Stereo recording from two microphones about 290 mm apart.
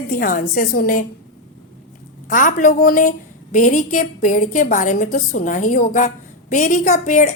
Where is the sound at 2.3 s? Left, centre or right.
Left.